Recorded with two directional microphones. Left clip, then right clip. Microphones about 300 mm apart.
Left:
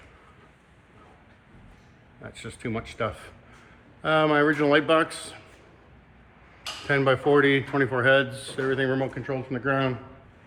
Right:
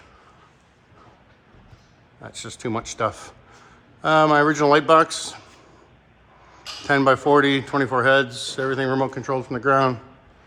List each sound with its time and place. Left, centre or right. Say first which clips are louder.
2.2 s speech: right 5 dB; centre
6.8 s speech: right 5 dB; centre